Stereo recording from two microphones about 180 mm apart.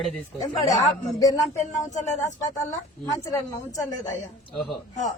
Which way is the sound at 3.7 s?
20° left (ahead or behind).